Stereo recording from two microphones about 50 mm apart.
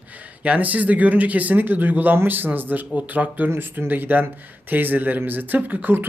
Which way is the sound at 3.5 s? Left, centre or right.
Right.